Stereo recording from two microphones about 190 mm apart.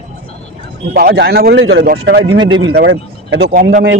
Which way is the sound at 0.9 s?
60° right (ahead or behind).